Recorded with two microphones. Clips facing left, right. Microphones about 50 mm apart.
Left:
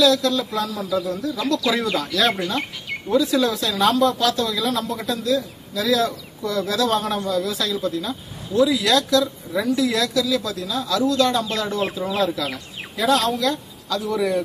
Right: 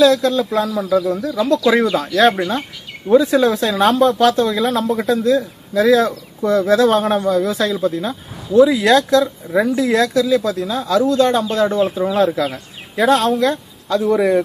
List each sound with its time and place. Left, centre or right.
0.0 s speech: right
0.7 s speech: centre
1.0 s speech: right